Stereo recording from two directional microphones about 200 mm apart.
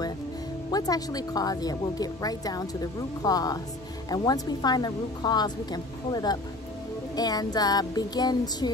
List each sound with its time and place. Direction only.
0.7 s a woman's voice: 20° left (ahead or behind)